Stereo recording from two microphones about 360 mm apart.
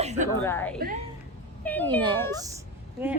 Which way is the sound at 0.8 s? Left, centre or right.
Right.